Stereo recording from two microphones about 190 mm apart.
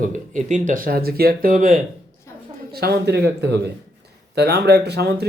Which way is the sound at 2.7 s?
55° right (ahead or behind).